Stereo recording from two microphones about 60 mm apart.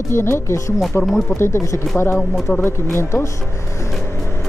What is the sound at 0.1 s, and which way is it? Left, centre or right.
A woman's voice, left.